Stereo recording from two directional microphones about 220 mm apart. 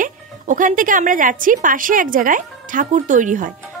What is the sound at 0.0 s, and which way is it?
Speech, 35° right (ahead or behind).